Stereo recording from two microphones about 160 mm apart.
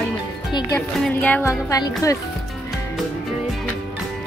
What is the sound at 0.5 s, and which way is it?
Music, 30° left (ahead or behind).